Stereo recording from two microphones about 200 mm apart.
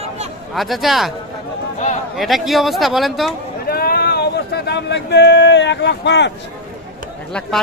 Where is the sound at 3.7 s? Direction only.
50° left (ahead or behind).